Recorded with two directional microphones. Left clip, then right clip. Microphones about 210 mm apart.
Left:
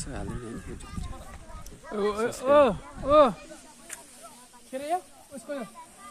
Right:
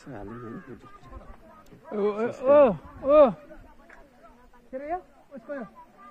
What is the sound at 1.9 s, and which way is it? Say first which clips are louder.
Speech: right 1 dB; 45° right (ahead or behind).